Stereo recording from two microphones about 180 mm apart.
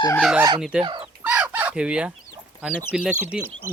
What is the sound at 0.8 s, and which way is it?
Speech, 25° right (ahead or behind).